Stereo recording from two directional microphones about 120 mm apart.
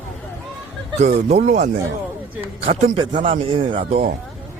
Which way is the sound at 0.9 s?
70° right (ahead or behind).